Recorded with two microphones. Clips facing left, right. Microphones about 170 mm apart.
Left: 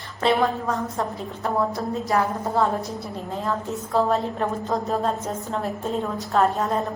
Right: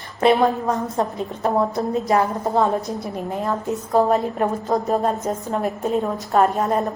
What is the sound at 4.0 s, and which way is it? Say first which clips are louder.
A woman's voice: right 4 dB; 15° right (ahead or behind).